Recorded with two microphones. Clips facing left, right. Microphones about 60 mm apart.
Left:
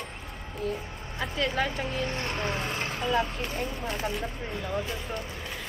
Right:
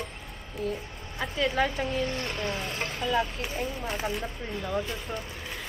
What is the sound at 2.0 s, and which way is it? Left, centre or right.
Speech, left.